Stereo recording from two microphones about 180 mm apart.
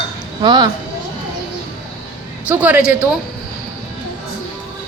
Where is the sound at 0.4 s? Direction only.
25° right (ahead or behind).